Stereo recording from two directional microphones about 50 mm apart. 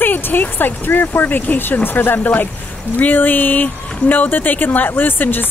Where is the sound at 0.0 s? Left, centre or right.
Left.